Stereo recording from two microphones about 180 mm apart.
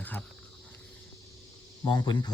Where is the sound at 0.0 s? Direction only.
10° left (ahead or behind).